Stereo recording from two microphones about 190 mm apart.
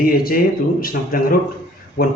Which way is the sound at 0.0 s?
50° left (ahead or behind).